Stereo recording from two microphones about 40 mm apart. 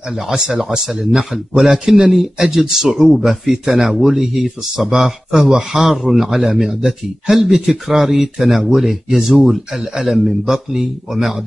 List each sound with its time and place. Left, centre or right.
0.3 s a man's voice: centre
10.4 s speech: centre